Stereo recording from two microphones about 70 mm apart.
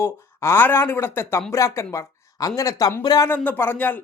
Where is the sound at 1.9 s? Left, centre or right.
Left.